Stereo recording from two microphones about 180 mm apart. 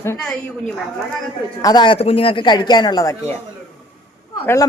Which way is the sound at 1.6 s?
25° left (ahead or behind).